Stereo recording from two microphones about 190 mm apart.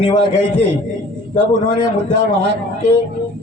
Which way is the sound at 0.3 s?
65° right (ahead or behind).